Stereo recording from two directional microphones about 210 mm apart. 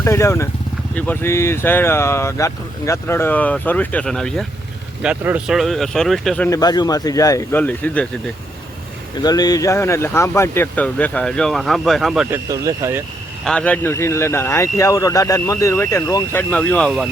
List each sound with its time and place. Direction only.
0.0 s speech: 15° left (ahead or behind)
6.6 s speech: 20° left (ahead or behind)
9.2 s speech: 20° left (ahead or behind); by 12.4 s centre (ahead or behind)
12.5 s speech: 15° right (ahead or behind)
13.4 s speech: 5° left (ahead or behind)